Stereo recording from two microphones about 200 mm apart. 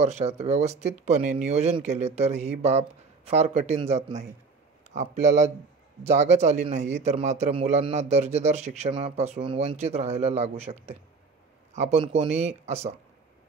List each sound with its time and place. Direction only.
0.0 s a man's voice: 35° right (ahead or behind)